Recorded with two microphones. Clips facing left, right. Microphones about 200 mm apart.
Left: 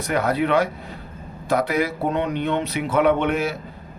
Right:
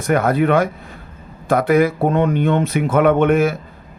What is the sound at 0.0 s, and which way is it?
Speech, 50° right (ahead or behind).